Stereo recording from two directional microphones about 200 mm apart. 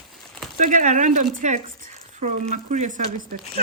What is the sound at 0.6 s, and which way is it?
Speech, 40° right (ahead or behind).